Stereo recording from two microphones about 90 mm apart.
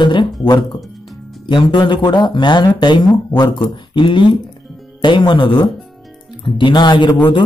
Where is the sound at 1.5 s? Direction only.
60° left (ahead or behind).